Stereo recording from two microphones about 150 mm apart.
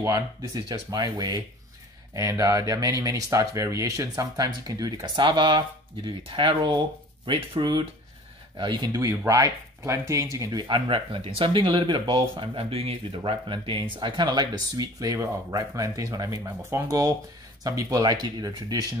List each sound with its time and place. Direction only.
0.0 s speech: 25° right (ahead or behind)